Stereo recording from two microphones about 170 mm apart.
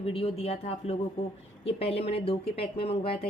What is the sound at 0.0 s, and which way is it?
A woman's voice, 35° left (ahead or behind).